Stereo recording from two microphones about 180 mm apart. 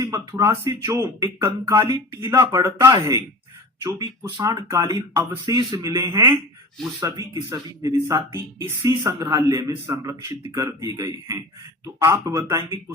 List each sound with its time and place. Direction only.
0.0 s speech: 20° right (ahead or behind)